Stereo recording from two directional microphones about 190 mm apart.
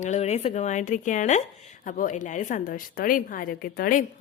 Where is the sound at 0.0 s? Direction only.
35° left (ahead or behind).